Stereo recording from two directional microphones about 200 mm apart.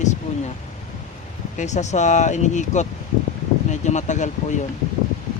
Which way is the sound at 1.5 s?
35° left (ahead or behind).